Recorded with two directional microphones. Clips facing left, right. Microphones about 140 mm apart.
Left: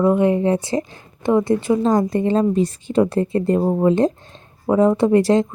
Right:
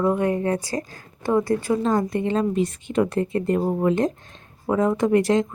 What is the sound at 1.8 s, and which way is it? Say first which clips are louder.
Speech: left 4 dB; 35° left (ahead or behind).